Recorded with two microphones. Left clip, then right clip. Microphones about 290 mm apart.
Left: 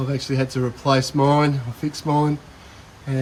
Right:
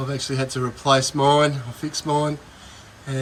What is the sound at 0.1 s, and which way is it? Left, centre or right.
Speech, centre.